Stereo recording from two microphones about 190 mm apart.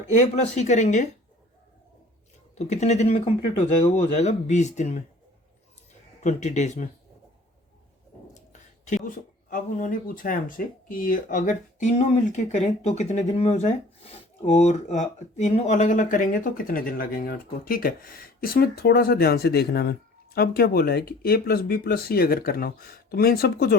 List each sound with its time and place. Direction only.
0.5 s speech: 35° left (ahead or behind)
2.6 s speech: 35° left (ahead or behind)
6.2 s speech: 40° left (ahead or behind)
9.0 s speech: 45° left (ahead or behind)